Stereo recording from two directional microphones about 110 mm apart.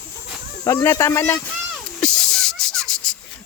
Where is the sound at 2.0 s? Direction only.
5° left (ahead or behind).